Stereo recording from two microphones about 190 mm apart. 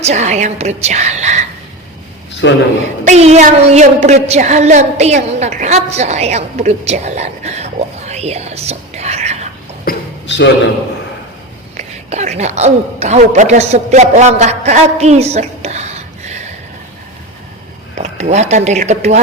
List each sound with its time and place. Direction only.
0.0 s a woman's voice: 35° right (ahead or behind)
2.4 s a man's voice: 65° left (ahead or behind)
3.0 s a woman's voice: 35° right (ahead or behind)
9.8 s a sound: 70° left (ahead or behind)
11.8 s a woman's voice: 35° right (ahead or behind)
17.9 s speech: 35° right (ahead or behind)